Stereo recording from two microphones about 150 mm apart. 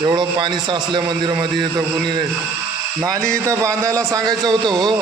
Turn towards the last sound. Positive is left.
turn(degrees=-30)  # may be behind; listen again after turning